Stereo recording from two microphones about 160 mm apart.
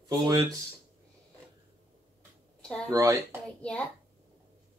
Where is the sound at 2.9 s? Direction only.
20° right (ahead or behind).